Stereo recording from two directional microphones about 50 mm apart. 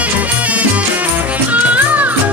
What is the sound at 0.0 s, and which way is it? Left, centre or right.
Music, right.